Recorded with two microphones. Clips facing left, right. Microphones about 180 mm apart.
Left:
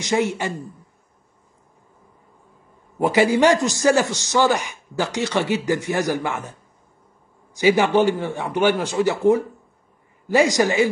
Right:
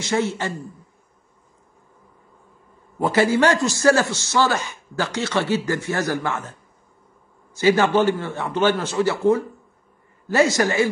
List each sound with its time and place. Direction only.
0.0 s a man's voice: 15° left (ahead or behind)
3.0 s a man's voice: 15° left (ahead or behind)
7.5 s a man's voice: 15° left (ahead or behind)